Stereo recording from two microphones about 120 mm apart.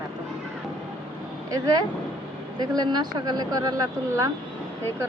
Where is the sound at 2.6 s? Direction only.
35° right (ahead or behind).